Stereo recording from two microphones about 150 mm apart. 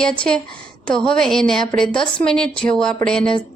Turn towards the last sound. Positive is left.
turn(degrees=5)  # may be behind; listen again after turning